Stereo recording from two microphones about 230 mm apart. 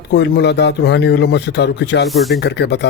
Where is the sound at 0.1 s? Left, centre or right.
Left.